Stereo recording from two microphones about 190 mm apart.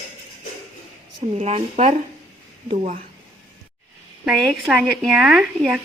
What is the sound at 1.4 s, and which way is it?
Speech, 35° right (ahead or behind).